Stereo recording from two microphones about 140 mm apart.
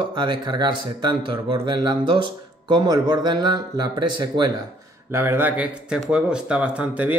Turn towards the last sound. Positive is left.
turn(degrees=-10)  # may be behind; listen again after turning